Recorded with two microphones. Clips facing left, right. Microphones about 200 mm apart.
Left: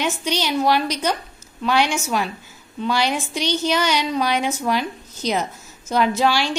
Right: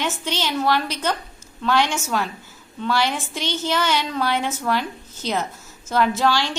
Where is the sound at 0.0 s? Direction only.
15° left (ahead or behind).